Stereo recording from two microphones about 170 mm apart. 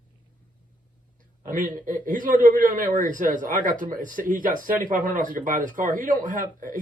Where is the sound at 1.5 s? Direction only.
55° right (ahead or behind).